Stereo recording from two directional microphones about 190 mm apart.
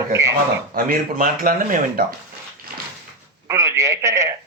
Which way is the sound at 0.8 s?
45° right (ahead or behind).